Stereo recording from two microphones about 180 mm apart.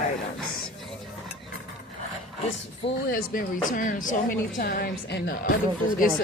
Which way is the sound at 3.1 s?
50° left (ahead or behind).